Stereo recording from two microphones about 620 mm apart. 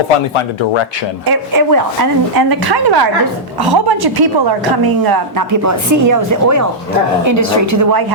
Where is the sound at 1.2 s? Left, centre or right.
Right.